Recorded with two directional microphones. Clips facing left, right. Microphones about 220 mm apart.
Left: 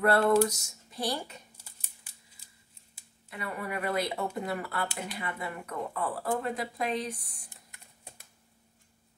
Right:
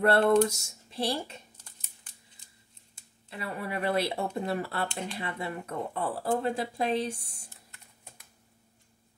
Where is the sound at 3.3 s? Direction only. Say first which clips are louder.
Right 1 dB; 30° right (ahead or behind).